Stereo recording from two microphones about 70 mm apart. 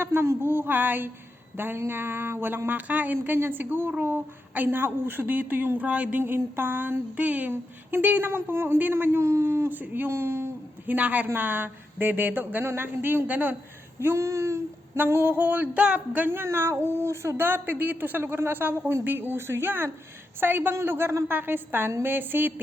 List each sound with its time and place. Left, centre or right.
0.0 s a woman's voice: right
9.6 s a woman's voice: right
10.8 s a woman's voice: right
14.0 s a sound: right
14.9 s speech: right
16.2 s a woman's voice: right